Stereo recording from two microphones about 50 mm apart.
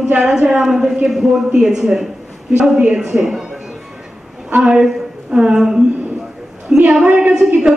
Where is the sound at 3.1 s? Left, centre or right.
Centre.